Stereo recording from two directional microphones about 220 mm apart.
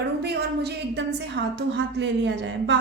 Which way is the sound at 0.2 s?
50° right (ahead or behind).